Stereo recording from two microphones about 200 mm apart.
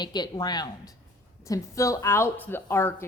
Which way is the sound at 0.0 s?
20° left (ahead or behind).